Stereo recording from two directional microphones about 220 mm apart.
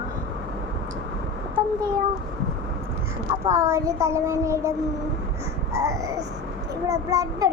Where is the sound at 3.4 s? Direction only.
15° right (ahead or behind).